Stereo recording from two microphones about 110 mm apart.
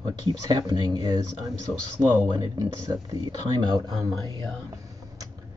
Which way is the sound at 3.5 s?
35° right (ahead or behind).